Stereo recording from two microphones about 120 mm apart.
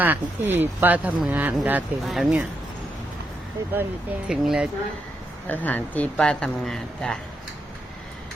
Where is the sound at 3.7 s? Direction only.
15° right (ahead or behind).